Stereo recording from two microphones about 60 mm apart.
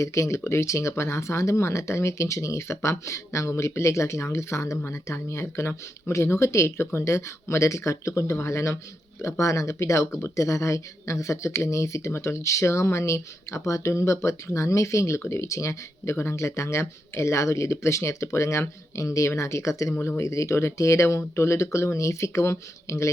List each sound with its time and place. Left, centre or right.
0.0 s speech: left